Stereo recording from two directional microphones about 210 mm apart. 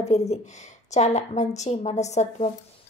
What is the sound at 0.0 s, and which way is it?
A woman's voice, 30° left (ahead or behind).